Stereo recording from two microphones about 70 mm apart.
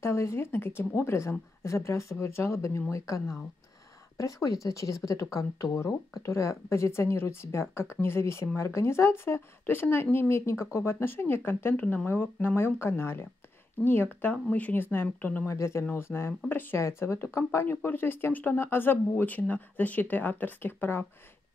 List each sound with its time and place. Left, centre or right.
0.0 s speech: left
14.3 s speech: left
15.4 s speech: left
16.8 s speech: left
17.6 s speech: left